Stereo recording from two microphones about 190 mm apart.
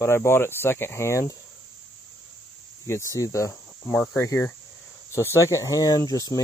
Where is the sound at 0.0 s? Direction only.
15° left (ahead or behind).